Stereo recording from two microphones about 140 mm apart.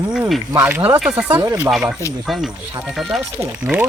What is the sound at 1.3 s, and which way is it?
Speech, 35° right (ahead or behind).